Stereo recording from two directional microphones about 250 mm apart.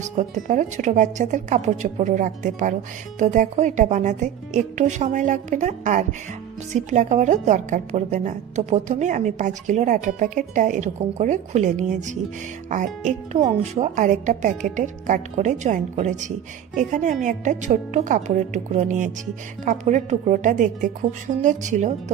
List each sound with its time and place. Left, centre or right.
0.2 s a woman's voice: right
13.4 s a woman's voice: right